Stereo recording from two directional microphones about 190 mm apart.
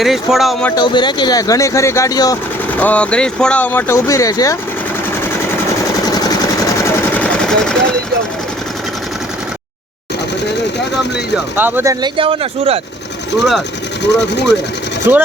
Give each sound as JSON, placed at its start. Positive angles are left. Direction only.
{"t": 0.0, "sound": "speech", "side_deg": 0}
{"t": 0.8, "sound": "speech", "side_deg": 25}
{"t": 2.7, "sound": "speech", "side_deg": 10}
{"t": 6.1, "sound": "sewing machine", "side_deg": 20}
{"t": 11.3, "sound": "speech", "side_deg": -10}
{"t": 12.1, "sound": "speech", "side_deg": -30}
{"t": 14.0, "sound": "speech", "side_deg": 65}
{"t": 15.1, "sound": "speech", "side_deg": -10}